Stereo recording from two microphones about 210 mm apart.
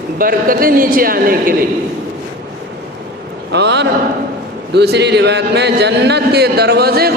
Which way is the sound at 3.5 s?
55° right (ahead or behind).